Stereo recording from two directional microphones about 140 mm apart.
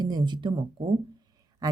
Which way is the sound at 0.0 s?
30° right (ahead or behind).